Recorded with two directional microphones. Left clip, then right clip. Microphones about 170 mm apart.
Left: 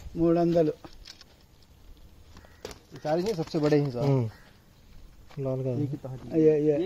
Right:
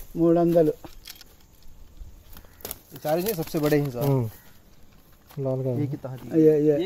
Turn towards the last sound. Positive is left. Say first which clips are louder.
# right 3 dB
turn(degrees=-65)  # may be behind; listen again after turning